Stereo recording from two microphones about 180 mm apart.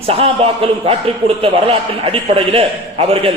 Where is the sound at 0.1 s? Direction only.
35° right (ahead or behind).